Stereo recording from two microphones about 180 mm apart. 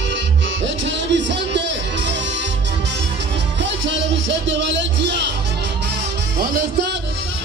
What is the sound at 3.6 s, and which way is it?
Music, 85° right.